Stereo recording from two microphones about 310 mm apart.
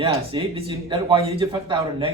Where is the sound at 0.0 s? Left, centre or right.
Centre.